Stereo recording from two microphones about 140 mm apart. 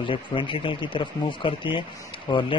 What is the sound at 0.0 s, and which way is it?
Speech, 40° left (ahead or behind).